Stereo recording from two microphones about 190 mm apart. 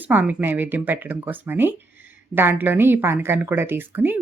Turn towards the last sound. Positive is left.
turn(degrees=-10)  # may be behind; listen again after turning